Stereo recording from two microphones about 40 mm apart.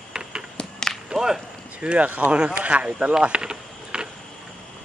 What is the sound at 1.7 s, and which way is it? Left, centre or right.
Speech, right.